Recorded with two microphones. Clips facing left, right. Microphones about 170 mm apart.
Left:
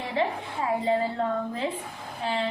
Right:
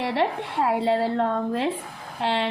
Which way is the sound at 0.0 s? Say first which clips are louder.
Right 4 dB; 75° right (ahead or behind).